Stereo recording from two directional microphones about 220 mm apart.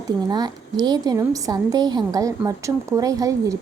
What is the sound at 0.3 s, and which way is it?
A woman's voice, 20° right (ahead or behind).